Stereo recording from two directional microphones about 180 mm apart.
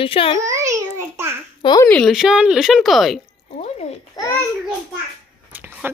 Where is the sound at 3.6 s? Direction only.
35° left (ahead or behind).